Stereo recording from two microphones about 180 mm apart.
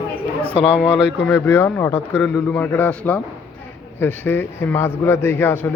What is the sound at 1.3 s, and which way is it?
A man's voice, 10° left (ahead or behind).